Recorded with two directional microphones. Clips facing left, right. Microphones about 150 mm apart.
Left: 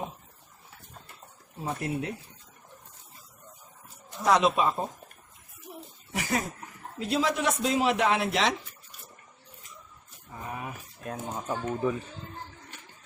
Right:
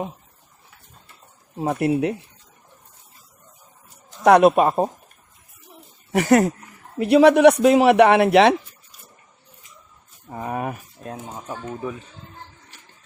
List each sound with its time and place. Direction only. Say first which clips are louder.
1.5 s a man's voice: right 11 dB; 70° right (ahead or behind)
4.2 s speech: right 10 dB; 60° right (ahead or behind)
6.1 s a man's voice: right 14 dB; 70° right (ahead or behind)
10.2 s speech: right 10 dB; 60° right (ahead or behind)
11.6 s speech: left 2 dB; centre (ahead or behind)